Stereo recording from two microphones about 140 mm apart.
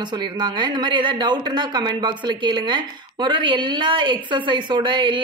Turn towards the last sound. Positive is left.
turn(degrees=-35)  # may be behind; listen again after turning